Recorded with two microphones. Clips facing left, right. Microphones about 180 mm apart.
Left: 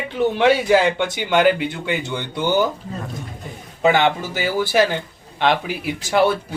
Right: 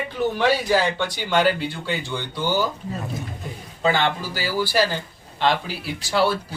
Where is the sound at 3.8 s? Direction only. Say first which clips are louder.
Left 5 dB; 20° left (ahead or behind).